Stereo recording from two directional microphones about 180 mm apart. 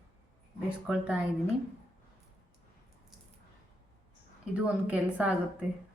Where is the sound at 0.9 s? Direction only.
5° right (ahead or behind).